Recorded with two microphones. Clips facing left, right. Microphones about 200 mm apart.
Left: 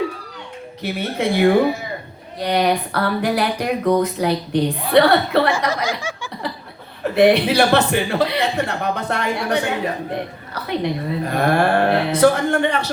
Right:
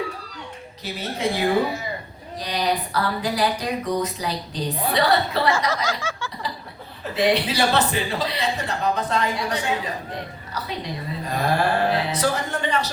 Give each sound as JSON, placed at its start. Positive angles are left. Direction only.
{"t": 0.8, "sound": "a man's voice", "side_deg": 60}
{"t": 5.7, "sound": "a sound", "side_deg": 15}
{"t": 7.0, "sound": "a man's voice", "side_deg": 60}